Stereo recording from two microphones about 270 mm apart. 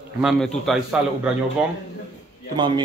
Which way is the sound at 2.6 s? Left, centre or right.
Centre.